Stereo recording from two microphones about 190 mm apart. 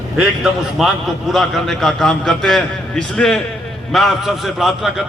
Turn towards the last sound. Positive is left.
turn(degrees=0)  # may be behind; listen again after turning